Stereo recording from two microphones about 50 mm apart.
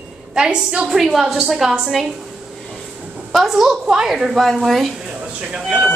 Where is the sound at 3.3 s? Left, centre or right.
Centre.